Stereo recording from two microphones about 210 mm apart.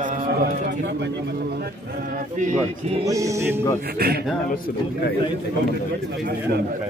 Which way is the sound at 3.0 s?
15° right (ahead or behind).